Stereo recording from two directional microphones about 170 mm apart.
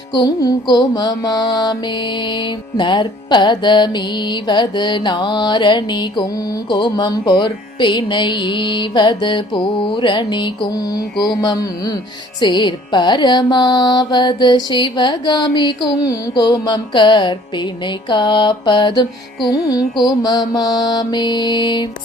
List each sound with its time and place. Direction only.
0.1 s music: 25° left (ahead or behind)